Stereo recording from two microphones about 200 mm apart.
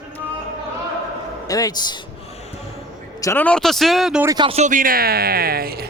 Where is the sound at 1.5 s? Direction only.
20° left (ahead or behind).